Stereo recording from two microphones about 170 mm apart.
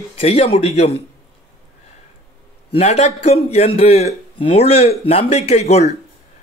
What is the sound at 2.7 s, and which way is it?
A man's voice, 40° left (ahead or behind).